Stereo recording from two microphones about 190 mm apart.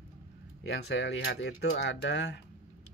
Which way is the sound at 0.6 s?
65° left (ahead or behind).